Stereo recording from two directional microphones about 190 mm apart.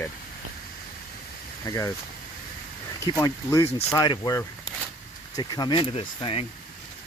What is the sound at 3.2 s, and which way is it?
Speech, 15° left (ahead or behind).